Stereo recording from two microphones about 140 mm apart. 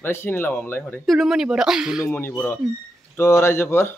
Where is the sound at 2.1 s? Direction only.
15° left (ahead or behind).